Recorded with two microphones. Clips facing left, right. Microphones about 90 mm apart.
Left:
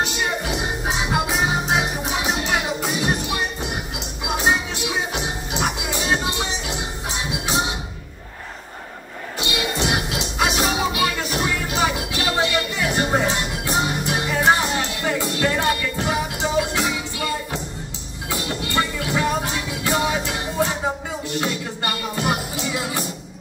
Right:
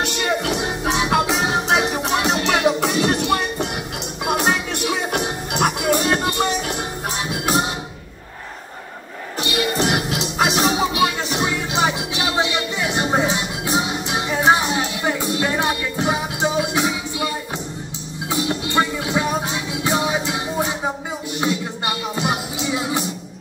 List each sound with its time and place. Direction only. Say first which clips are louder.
0.0 s music: right 2 dB; 70° right (ahead or behind)
9.4 s music: right 3 dB; 35° right (ahead or behind); by 23.0 s 20° right (ahead or behind)